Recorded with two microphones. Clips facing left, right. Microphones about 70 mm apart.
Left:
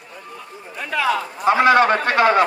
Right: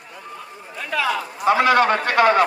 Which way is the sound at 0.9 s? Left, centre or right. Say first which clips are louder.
Left 2 dB; left.